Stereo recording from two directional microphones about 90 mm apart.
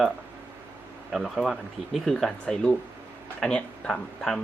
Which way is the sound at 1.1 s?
Centre (ahead or behind).